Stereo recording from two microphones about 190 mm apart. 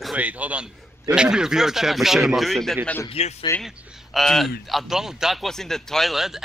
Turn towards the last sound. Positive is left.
turn(degrees=0)  # may be behind; listen again after turning